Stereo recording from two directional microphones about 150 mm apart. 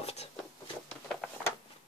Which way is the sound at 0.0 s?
45° left (ahead or behind).